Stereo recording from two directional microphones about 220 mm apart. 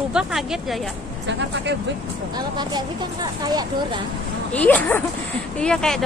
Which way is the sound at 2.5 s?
20° right (ahead or behind).